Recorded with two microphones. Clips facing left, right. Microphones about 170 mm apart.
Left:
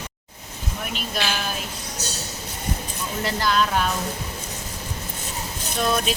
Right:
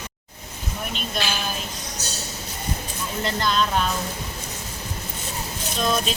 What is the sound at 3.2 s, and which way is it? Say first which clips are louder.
Speech: left 1 dB; 5° left (ahead or behind).